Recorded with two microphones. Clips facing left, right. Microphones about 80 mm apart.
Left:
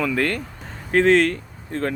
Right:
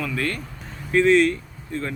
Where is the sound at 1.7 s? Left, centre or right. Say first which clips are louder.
Left 4 dB; left.